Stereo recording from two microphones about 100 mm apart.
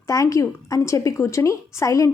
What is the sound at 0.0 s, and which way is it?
A woman's voice, 35° left (ahead or behind).